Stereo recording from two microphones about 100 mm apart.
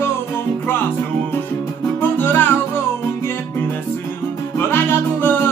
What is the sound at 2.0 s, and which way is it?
Music, 20° left (ahead or behind).